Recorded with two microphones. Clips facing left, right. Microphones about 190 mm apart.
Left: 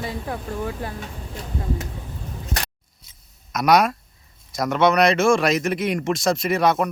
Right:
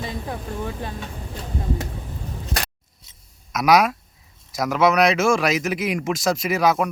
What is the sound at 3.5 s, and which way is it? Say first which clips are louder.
Speech: even; centre (ahead or behind).